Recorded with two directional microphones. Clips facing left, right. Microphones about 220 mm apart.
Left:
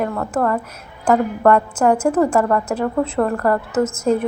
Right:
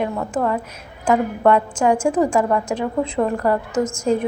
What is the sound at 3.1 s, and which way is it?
Speech, 10° right (ahead or behind).